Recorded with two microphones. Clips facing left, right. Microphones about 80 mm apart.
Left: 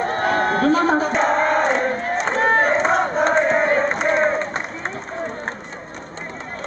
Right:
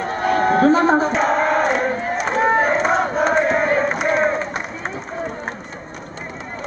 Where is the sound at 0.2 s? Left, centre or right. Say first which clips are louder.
Right 5 dB; centre.